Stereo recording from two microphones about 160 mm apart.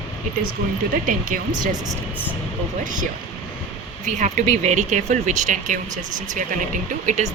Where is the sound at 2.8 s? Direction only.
55° right (ahead or behind).